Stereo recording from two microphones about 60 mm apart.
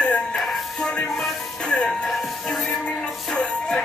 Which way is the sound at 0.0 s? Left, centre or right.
Centre.